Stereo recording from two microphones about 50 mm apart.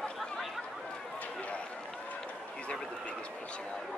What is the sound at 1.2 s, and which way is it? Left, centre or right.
Run, left.